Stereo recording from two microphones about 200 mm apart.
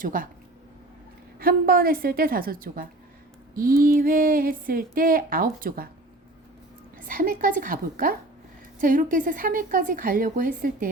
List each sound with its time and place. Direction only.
0.0 s speech: 45° right (ahead or behind)
1.4 s speech: 45° right (ahead or behind)
3.5 s a sound: 45° right (ahead or behind)
3.8 s speech: 45° right (ahead or behind)
7.1 s speech: 45° right (ahead or behind)